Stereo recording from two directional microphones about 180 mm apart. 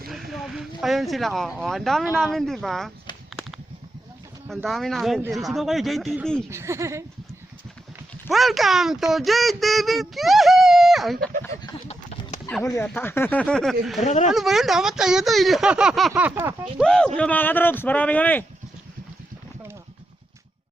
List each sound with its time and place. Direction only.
0.1 s speech: centre (ahead or behind)
4.4 s speech: centre (ahead or behind)
6.5 s speech: 15° right (ahead or behind)
8.3 s speech: centre (ahead or behind)
12.6 s speech: 15° left (ahead or behind)
14.0 s speech: 40° left (ahead or behind)
14.3 s speech: centre (ahead or behind)
16.7 s speech: 5° left (ahead or behind)